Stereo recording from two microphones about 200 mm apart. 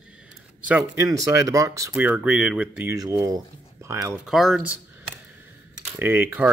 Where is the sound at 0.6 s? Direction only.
10° right (ahead or behind).